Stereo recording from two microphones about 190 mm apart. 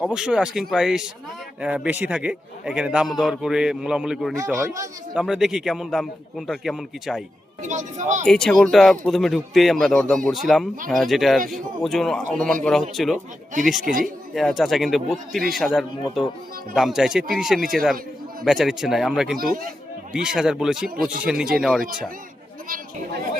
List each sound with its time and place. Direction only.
0.0 s a man's voice: 5° right (ahead or behind)
4.5 s speech: 15° right (ahead or behind)
5.1 s a man's voice: centre (ahead or behind)
7.6 s speech: 40° right (ahead or behind)
8.3 s a man's voice: centre (ahead or behind)
19.4 s speech: 50° right (ahead or behind)
20.1 s a man's voice: 5° right (ahead or behind)